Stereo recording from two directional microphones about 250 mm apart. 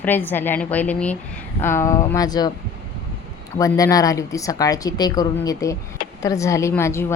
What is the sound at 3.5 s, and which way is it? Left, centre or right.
Speech, centre.